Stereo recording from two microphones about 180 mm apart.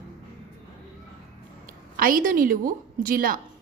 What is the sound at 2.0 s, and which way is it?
A woman's voice, 50° right (ahead or behind).